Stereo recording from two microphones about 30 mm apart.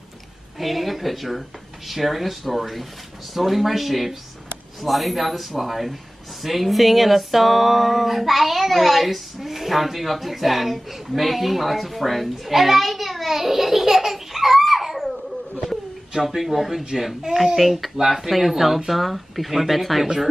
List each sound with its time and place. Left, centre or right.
0.6 s music: centre
11.1 s a sound: centre
16.2 s speech: centre
17.6 s music: centre
17.9 s speech: centre
18.3 s music: centre